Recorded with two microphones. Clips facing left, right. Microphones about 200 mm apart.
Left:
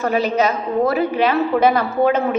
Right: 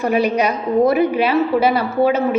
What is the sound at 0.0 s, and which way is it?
A woman's voice, 10° right (ahead or behind).